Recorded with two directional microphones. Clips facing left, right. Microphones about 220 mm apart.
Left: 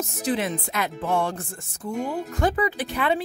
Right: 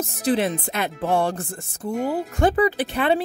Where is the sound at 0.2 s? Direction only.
35° right (ahead or behind).